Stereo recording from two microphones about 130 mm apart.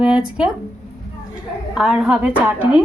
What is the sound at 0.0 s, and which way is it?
Speech, 5° right (ahead or behind).